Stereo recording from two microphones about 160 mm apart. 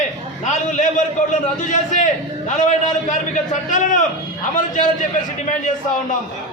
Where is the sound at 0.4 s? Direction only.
50° left (ahead or behind).